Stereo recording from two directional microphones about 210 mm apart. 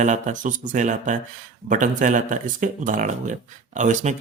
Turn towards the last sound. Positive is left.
turn(degrees=-35)  # may be behind; listen again after turning